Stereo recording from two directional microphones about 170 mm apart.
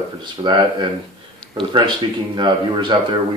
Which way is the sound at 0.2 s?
25° right (ahead or behind).